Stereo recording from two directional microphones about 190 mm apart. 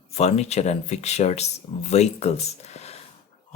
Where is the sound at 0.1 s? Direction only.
35° left (ahead or behind).